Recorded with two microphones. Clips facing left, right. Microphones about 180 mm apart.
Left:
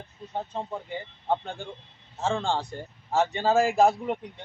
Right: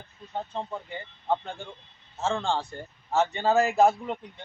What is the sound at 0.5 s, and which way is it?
Speech, 5° left (ahead or behind).